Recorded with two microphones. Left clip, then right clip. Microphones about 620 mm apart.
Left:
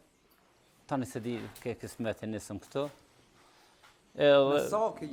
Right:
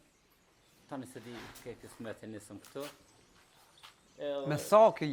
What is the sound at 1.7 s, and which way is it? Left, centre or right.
Speech, left.